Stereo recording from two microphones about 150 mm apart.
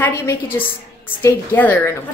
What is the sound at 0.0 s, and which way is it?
A woman's voice, 15° left (ahead or behind).